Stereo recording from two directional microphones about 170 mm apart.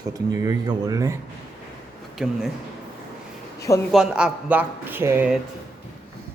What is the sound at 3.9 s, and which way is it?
Speech, 5° right (ahead or behind).